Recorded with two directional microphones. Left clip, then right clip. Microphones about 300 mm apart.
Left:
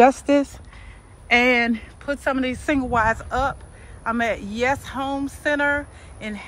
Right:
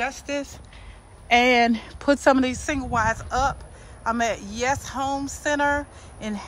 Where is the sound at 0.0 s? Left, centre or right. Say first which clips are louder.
Left 12 dB; centre.